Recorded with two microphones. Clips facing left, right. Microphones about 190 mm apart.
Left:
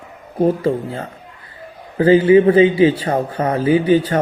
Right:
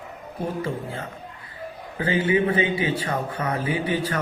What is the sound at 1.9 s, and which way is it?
A man's voice, 35° left (ahead or behind).